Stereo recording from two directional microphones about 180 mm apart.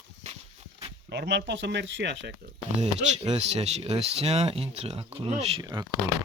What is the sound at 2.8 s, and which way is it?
Speech, 40° right (ahead or behind).